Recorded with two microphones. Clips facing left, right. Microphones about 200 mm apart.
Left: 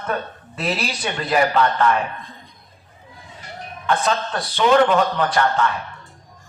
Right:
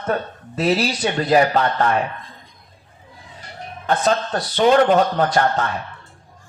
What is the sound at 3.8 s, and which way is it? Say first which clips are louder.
Speech: right 2 dB; 40° right (ahead or behind).